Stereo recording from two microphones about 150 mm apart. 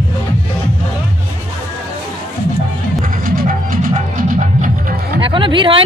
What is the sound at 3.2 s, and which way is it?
Music, 70° right (ahead or behind).